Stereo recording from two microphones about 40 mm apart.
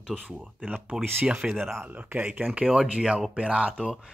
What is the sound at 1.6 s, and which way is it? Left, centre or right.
Speech, centre.